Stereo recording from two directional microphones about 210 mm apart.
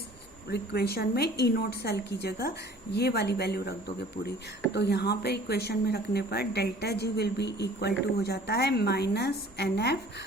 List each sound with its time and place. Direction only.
0.4 s speech: 50° left (ahead or behind)